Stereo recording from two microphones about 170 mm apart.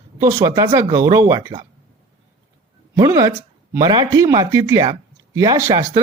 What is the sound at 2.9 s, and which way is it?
Speech, 20° right (ahead or behind).